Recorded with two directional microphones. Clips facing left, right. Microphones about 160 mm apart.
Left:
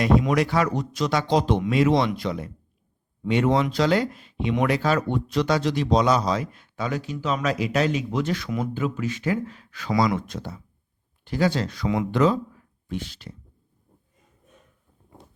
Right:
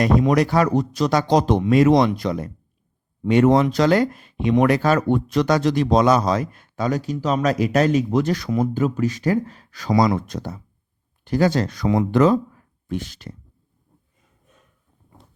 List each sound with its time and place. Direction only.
0.0 s speech: 40° right (ahead or behind)